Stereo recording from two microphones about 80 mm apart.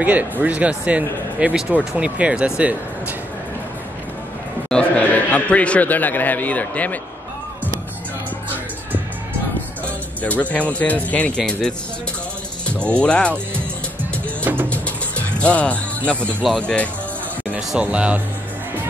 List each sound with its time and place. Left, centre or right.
0.0 s speech: centre
4.6 s a man's voice: centre
10.2 s speech: centre
12.8 s speech: centre
14.4 s music: right
14.7 s music: centre
16.1 s speech: centre
17.6 s speech: centre